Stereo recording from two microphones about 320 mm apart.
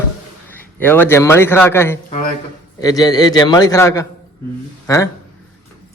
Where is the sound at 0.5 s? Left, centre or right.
Centre.